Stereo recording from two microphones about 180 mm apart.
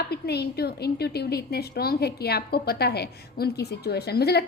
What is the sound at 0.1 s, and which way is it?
A woman's voice, 65° left (ahead or behind).